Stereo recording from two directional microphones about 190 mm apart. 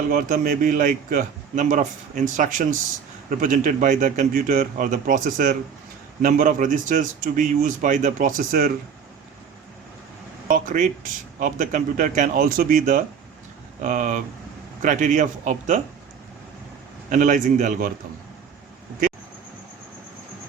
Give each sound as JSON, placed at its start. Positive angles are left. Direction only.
{"t": 0.1, "sound": "speech", "side_deg": -45}
{"t": 10.5, "sound": "speech", "side_deg": -45}
{"t": 17.1, "sound": "speech", "side_deg": -40}